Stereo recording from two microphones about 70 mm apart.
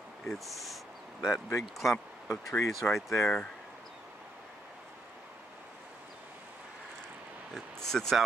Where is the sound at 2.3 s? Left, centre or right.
Left.